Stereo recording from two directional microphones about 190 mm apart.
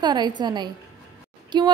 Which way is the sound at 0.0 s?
25° right (ahead or behind).